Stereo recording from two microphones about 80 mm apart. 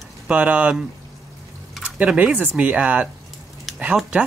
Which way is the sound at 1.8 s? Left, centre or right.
Centre.